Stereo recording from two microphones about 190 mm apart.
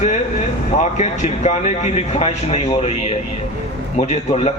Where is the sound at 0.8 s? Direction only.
35° left (ahead or behind).